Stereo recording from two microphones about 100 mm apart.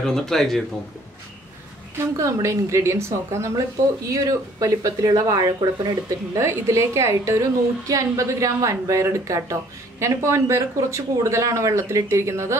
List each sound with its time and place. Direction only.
0.0 s speech: 5° left (ahead or behind)
2.1 s a woman's voice: 30° right (ahead or behind)
6.3 s a woman's voice: 30° right (ahead or behind)